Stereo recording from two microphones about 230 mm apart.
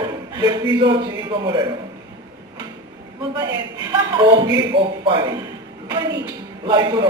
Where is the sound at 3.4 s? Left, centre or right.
Centre.